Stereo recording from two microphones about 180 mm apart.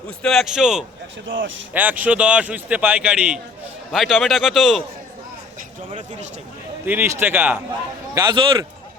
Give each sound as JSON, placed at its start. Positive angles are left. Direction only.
{"t": 0.2, "sound": "a man's voice", "side_deg": 0}
{"t": 1.3, "sound": "speech", "side_deg": -90}
{"t": 1.7, "sound": "a man's voice", "side_deg": -10}
{"t": 6.8, "sound": "speech", "side_deg": -10}
{"t": 8.1, "sound": "a man's voice", "side_deg": -20}